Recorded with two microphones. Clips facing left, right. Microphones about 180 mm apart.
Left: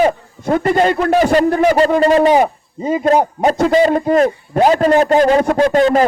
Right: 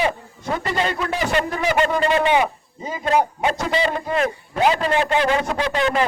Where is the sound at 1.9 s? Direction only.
40° left (ahead or behind).